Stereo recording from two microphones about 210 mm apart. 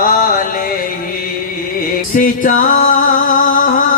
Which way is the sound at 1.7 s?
40° left (ahead or behind).